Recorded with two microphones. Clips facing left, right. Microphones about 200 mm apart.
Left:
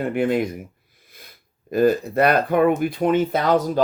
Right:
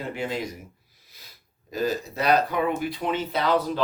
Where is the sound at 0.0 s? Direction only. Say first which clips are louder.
Left 9 dB; 55° left (ahead or behind).